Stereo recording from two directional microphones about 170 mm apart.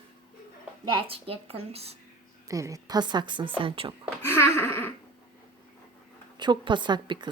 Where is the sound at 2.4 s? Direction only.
20° right (ahead or behind).